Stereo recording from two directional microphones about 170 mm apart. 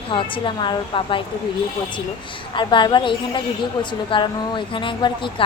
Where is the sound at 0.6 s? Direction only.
30° left (ahead or behind).